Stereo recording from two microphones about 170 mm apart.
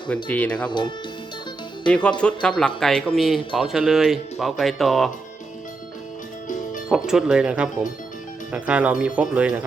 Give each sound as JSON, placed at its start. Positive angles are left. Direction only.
{"t": 0.3, "sound": "speech", "side_deg": 10}
{"t": 0.7, "sound": "speech", "side_deg": 25}
{"t": 1.9, "sound": "speech", "side_deg": 5}
{"t": 7.1, "sound": "speech", "side_deg": -5}